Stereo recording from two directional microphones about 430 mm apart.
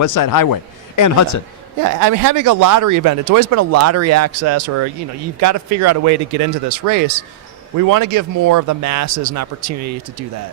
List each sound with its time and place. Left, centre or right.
0.0 s speech: left
1.8 s a man's voice: right